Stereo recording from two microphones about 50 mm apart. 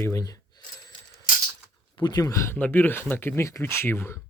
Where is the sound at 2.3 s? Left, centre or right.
Left.